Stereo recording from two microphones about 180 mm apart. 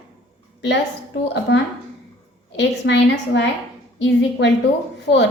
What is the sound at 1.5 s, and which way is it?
A woman's voice, 80° left.